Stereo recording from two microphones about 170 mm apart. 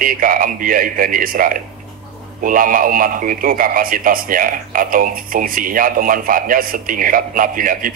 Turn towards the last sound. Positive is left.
turn(degrees=-55)  # may be behind; listen again after turning